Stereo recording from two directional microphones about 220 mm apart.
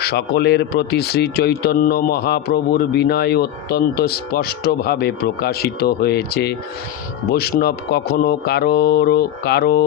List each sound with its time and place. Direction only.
0.0 s speech: 50° left (ahead or behind)